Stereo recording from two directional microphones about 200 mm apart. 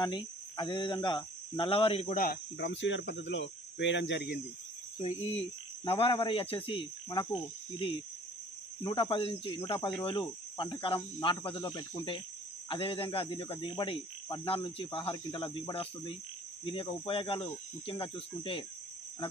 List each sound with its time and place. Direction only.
0.0 s speech: 20° left (ahead or behind)
2.1 s speech: 50° left (ahead or behind)
4.9 s speech: 35° left (ahead or behind)
9.8 s speech: 10° left (ahead or behind)
10.6 s speech: 25° left (ahead or behind)
17.1 s speech: 25° left (ahead or behind)